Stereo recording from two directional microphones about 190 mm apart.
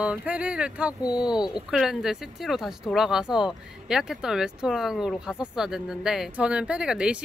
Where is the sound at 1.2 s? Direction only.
5° right (ahead or behind).